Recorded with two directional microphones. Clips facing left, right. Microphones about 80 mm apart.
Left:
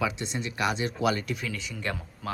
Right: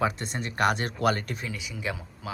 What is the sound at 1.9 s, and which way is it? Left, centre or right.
Speech, centre.